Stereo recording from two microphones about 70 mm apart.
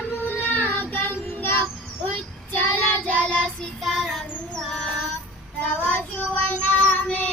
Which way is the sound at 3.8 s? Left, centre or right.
Centre.